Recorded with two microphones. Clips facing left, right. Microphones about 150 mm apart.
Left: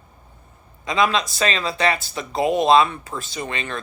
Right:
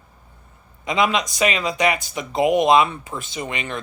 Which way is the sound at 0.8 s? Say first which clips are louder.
Even; 20° right (ahead or behind).